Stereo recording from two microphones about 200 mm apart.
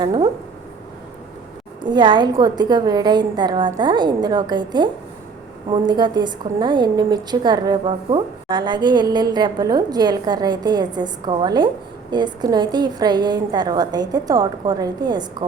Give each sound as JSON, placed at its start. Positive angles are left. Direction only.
{"t": 0.0, "sound": "a woman's voice", "side_deg": -20}
{"t": 1.8, "sound": "a woman's voice", "side_deg": -25}